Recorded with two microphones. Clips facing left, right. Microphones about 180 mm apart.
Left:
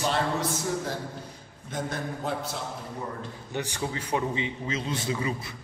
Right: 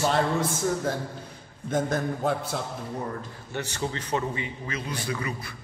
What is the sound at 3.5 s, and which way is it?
A man's voice, 15° left (ahead or behind).